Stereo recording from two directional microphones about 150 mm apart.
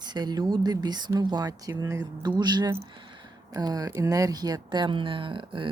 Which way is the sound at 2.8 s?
30° right (ahead or behind).